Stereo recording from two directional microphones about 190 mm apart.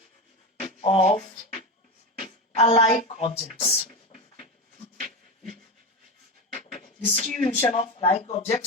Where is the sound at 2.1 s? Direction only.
35° left (ahead or behind).